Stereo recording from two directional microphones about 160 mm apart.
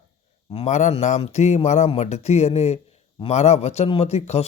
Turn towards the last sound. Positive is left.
turn(degrees=40)  # may be behind; listen again after turning